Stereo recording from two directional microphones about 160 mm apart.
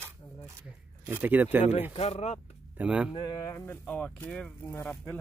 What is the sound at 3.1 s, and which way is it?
Speech, 25° left (ahead or behind).